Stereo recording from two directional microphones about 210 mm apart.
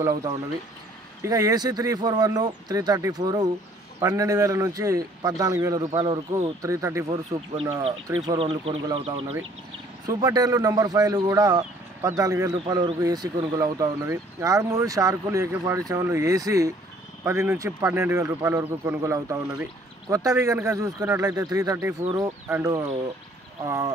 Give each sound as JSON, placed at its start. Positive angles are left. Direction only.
{"t": 0.0, "sound": "speech", "side_deg": -15}
{"t": 7.5, "sound": "speech", "side_deg": -25}